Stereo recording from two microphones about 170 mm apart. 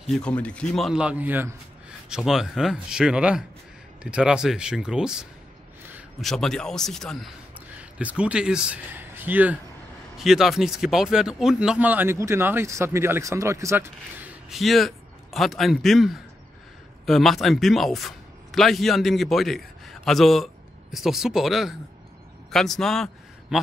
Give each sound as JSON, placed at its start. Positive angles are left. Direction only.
{"t": 0.0, "sound": "a man's voice", "side_deg": 5}
{"t": 14.5, "sound": "a man's voice", "side_deg": 0}